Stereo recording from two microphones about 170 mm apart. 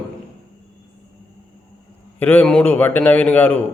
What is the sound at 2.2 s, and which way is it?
A man's voice, 10° left (ahead or behind).